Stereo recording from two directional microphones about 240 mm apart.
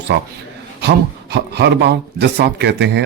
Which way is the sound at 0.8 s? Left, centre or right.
Right.